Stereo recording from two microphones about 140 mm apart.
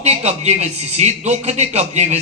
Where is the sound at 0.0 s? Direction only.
50° right (ahead or behind).